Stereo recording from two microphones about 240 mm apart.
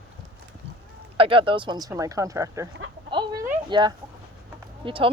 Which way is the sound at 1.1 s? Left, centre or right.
Right.